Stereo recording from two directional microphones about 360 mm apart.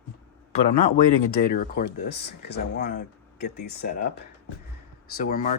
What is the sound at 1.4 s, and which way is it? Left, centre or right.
Speech, left.